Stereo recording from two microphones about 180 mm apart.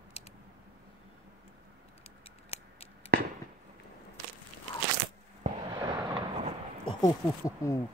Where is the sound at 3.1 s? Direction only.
60° right (ahead or behind).